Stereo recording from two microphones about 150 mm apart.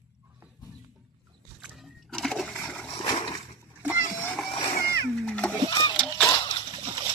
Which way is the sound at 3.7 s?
10° right (ahead or behind).